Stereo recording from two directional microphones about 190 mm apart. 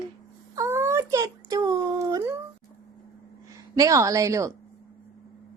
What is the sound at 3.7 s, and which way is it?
Speech, 15° right (ahead or behind).